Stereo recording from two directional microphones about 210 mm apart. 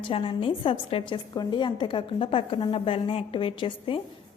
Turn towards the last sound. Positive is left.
turn(degrees=25)  # may be behind; listen again after turning